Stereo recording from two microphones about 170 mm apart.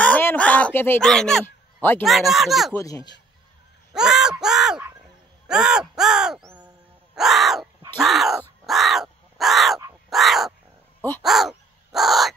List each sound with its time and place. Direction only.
0.0 s a sound: 10° left (ahead or behind)
2.0 s speech: centre (ahead or behind)
2.7 s speech: 20° left (ahead or behind)
3.9 s a sound: 5° right (ahead or behind)
5.5 s speech: 5° right (ahead or behind)
7.2 s owl: centre (ahead or behind)
8.0 s crow: centre (ahead or behind)
10.0 s owl: centre (ahead or behind)
11.0 s speech: 10° left (ahead or behind)
11.2 s crow: centre (ahead or behind)